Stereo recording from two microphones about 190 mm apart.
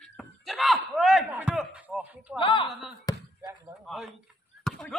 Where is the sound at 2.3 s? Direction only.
25° left (ahead or behind).